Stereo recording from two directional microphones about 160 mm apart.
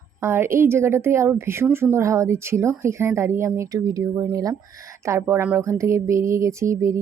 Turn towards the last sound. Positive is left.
turn(degrees=-20)  # may be behind; listen again after turning